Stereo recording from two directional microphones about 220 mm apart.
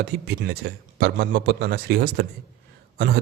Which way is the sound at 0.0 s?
50° right (ahead or behind).